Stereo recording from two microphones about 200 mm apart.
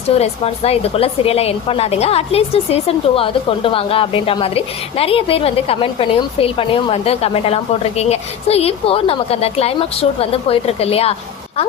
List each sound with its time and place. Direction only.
0.2 s speech: 30° left (ahead or behind)